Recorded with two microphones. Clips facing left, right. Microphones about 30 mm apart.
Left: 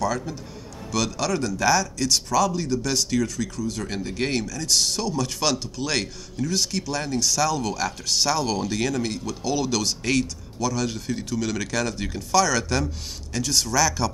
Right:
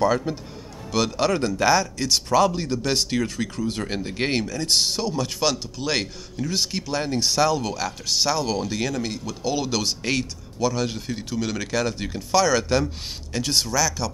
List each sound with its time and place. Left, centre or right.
0.0 s speech: right
2.2 s speech: right
3.9 s speech: right
7.5 s speech: centre
13.7 s speech: centre